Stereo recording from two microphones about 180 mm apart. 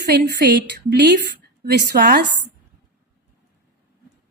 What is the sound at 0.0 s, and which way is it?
A woman's voice, 65° right (ahead or behind).